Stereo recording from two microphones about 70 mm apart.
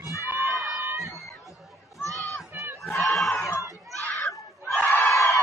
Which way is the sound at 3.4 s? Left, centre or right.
Left.